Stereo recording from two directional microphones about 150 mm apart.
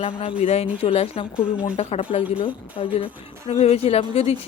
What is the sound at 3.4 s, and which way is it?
Speech, 50° left (ahead or behind).